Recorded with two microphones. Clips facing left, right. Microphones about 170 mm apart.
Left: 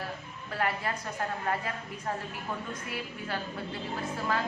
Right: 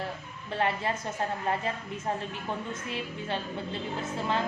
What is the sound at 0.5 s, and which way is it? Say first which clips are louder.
Speech: right 3 dB; 25° right (ahead or behind).